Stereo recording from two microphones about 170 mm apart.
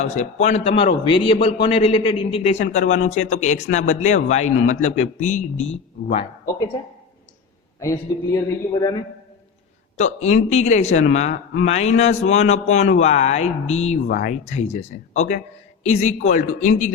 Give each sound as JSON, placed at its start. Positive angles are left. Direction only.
{"t": 0.0, "sound": "a man's voice", "side_deg": 45}
{"t": 7.8, "sound": "a man's voice", "side_deg": 20}
{"t": 10.0, "sound": "a man's voice", "side_deg": 45}